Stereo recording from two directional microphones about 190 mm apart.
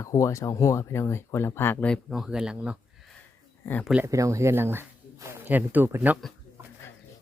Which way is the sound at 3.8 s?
5° right (ahead or behind).